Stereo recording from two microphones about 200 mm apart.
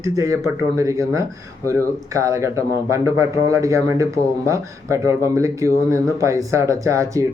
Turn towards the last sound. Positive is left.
turn(degrees=-15)  # may be behind; listen again after turning